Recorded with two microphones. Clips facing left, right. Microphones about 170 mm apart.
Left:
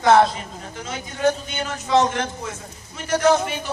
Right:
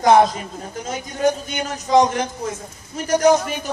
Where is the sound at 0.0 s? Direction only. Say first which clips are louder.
Right 2 dB; 15° right (ahead or behind).